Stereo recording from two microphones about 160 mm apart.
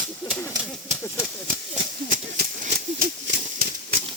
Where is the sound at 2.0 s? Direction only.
60° right (ahead or behind).